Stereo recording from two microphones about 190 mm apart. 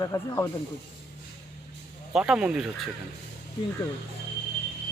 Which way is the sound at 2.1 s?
5° right (ahead or behind).